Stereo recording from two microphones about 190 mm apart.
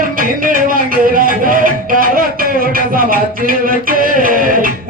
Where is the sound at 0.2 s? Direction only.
45° right (ahead or behind).